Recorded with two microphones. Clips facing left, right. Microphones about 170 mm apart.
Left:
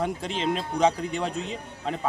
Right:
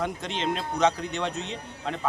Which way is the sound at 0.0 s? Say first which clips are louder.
Left 2 dB; 5° left (ahead or behind).